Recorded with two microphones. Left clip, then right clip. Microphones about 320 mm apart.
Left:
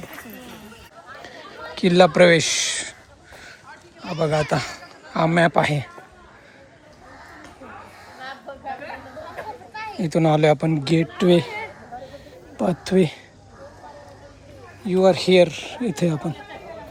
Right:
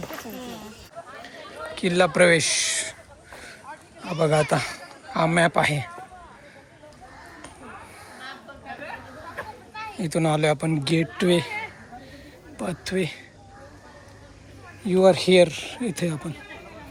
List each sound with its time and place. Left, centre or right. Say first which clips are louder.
1.7 s speech: left 5 dB; centre
4.0 s speech: even; centre
8.2 s a sound: left 7 dB; left
10.0 s speech: left 5 dB; centre
12.1 s a sound: left 6 dB; centre
14.8 s speech: left 1 dB; centre